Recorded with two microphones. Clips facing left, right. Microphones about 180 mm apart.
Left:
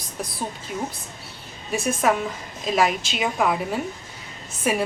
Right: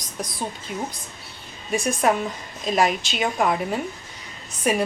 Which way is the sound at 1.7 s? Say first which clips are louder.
Right 1 dB; centre (ahead or behind).